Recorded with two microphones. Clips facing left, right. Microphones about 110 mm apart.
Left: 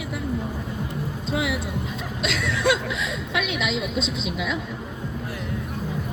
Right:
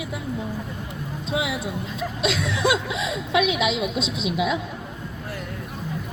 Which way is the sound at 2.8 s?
15° right (ahead or behind).